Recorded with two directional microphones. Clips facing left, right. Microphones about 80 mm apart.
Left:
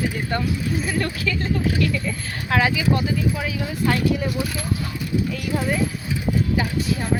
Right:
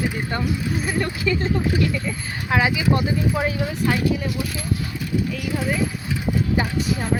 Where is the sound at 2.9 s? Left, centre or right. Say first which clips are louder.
Right 1 dB; right.